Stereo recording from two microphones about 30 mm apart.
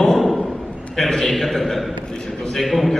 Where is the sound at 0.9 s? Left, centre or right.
Centre.